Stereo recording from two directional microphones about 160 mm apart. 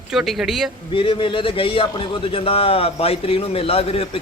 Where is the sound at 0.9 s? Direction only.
30° left (ahead or behind).